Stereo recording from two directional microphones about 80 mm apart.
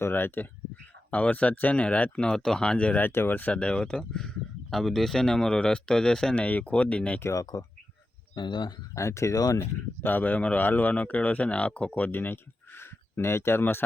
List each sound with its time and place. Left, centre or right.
0.0 s speech: left
3.1 s speech: left
7.2 s speech: left
8.4 s speech: left
9.0 s speech: left
9.6 s speech: left